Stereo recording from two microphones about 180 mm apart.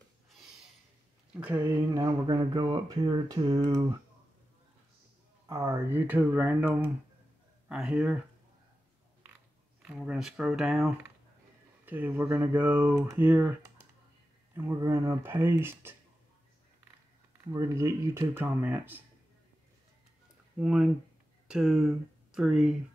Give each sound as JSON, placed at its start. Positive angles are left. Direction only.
{"t": 1.3, "sound": "speech", "side_deg": -10}
{"t": 5.5, "sound": "speech", "side_deg": -15}
{"t": 9.8, "sound": "speech", "side_deg": -5}
{"t": 14.5, "sound": "speech", "side_deg": -15}
{"t": 17.4, "sound": "speech", "side_deg": -20}
{"t": 20.5, "sound": "speech", "side_deg": -5}